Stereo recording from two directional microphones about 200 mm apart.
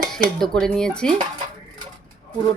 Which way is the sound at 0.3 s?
Centre (ahead or behind).